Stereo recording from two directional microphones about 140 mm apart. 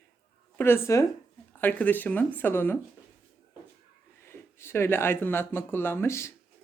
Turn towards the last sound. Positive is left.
turn(degrees=20)  # may be behind; listen again after turning